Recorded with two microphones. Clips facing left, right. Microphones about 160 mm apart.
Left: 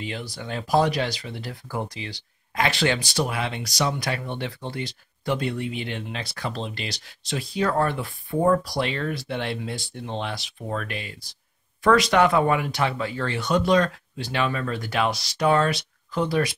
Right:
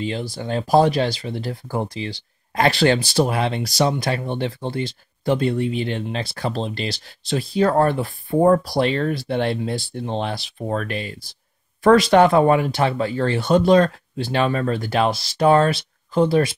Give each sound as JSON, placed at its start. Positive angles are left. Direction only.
{"t": 0.0, "sound": "speech", "side_deg": -30}